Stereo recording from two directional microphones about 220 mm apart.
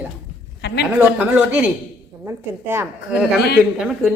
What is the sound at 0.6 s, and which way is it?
Speech, 50° left (ahead or behind).